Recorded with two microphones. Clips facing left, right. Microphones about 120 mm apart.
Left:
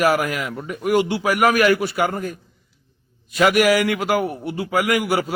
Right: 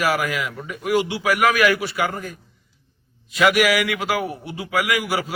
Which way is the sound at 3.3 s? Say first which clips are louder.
Left 2 dB; 45° left (ahead or behind).